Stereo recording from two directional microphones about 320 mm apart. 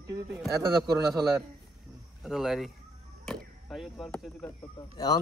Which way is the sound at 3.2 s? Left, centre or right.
Centre.